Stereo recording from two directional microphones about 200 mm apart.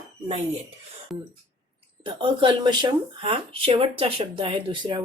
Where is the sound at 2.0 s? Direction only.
25° right (ahead or behind).